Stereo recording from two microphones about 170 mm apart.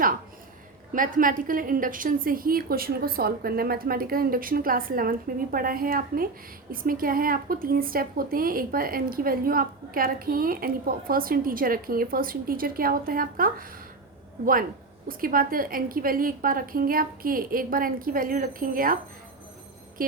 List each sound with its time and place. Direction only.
0.9 s speech: 55° right (ahead or behind)
15.0 s speech: 55° right (ahead or behind)
20.0 s speech: 55° right (ahead or behind)